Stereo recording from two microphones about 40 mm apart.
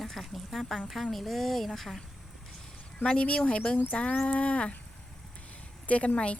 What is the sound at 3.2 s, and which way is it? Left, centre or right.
Speech, left.